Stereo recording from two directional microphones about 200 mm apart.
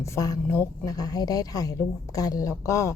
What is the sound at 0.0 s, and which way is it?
A woman's voice, 15° left (ahead or behind).